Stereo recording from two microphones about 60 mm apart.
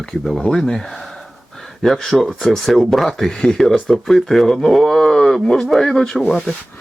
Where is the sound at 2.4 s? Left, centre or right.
Centre.